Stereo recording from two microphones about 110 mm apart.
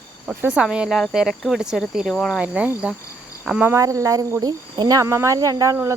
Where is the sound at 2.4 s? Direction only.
10° right (ahead or behind).